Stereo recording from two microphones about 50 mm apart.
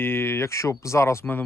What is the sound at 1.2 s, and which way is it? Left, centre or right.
Speech, left.